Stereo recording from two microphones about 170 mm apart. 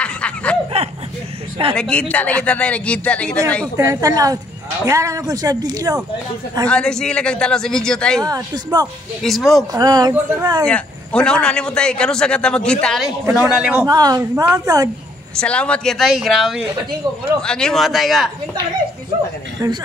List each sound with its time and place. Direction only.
0.0 s snicker: 5° left (ahead or behind)
1.8 s a man's voice: 5° left (ahead or behind)
3.7 s speech: 20° right (ahead or behind)
6.7 s a man's voice: 5° left (ahead or behind)
8.2 s speech: 20° right (ahead or behind)
9.2 s a man's voice: centre (ahead or behind)
9.7 s speech: 20° right (ahead or behind)
10.6 s a man's voice: 5° left (ahead or behind)
13.2 s a man's voice: 15° right (ahead or behind)
13.8 s speech: 20° right (ahead or behind)
15.3 s a man's voice: 5° left (ahead or behind)
19.6 s speech: 20° right (ahead or behind)